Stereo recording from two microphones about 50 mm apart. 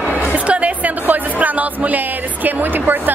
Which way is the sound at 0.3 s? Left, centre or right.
Right.